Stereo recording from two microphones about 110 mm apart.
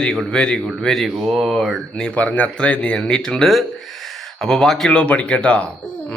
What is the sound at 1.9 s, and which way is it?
Speech, 10° left (ahead or behind).